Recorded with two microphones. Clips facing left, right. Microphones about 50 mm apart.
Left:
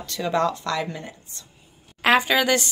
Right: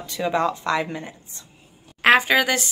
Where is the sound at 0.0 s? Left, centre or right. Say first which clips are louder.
Right 1 dB; centre.